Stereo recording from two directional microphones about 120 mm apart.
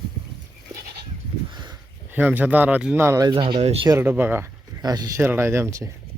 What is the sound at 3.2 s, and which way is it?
Speech, 40° right (ahead or behind).